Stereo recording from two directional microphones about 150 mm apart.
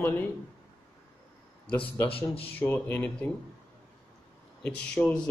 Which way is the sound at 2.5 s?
10° left (ahead or behind).